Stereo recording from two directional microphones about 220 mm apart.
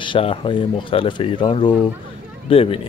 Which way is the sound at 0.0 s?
25° left (ahead or behind).